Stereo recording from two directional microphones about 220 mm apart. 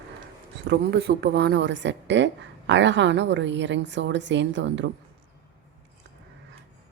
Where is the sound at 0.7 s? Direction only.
50° right (ahead or behind).